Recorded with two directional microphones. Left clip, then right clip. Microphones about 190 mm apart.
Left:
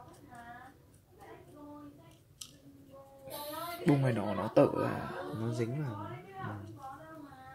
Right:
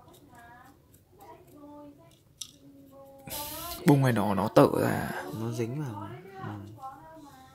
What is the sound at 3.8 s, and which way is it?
Speech, 40° right (ahead or behind).